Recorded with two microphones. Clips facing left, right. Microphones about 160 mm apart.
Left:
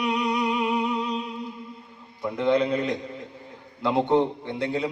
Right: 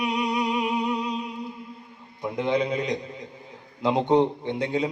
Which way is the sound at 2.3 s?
15° right (ahead or behind).